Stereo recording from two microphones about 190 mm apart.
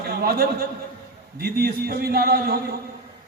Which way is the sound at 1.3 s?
55° right (ahead or behind).